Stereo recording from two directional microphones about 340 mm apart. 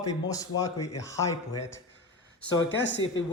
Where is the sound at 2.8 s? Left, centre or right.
Left.